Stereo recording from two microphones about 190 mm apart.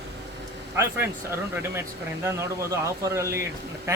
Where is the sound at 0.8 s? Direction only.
10° right (ahead or behind).